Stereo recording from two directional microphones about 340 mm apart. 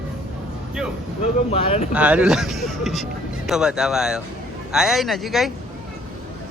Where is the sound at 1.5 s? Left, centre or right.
Centre.